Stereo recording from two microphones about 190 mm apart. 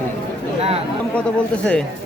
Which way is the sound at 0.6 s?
30° right (ahead or behind).